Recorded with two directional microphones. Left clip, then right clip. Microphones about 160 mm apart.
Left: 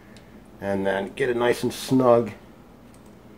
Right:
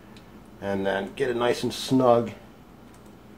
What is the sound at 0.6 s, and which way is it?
Speech, 30° left (ahead or behind).